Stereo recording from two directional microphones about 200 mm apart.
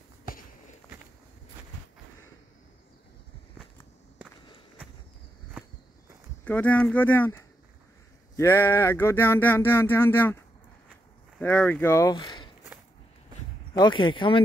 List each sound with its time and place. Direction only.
6.4 s a sound: 5° left (ahead or behind)
11.3 s speech: 10° left (ahead or behind)
13.7 s speech: 25° left (ahead or behind)